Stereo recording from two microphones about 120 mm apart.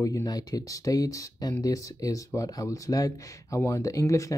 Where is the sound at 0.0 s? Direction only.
30° left (ahead or behind).